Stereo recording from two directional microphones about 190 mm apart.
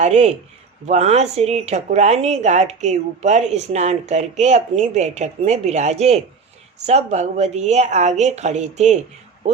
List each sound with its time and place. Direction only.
0.0 s speech: 35° right (ahead or behind)